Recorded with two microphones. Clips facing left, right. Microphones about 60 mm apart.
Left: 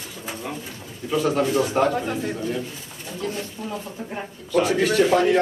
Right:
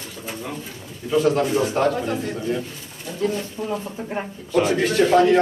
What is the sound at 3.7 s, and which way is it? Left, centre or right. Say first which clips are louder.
Speech: right 4 dB; right.